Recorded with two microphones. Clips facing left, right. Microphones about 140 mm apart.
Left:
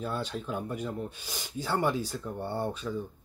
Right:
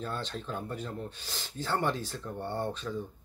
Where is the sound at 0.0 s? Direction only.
10° left (ahead or behind).